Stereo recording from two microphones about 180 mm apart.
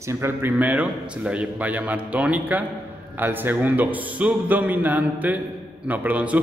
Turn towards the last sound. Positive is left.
turn(degrees=-10)  # may be behind; listen again after turning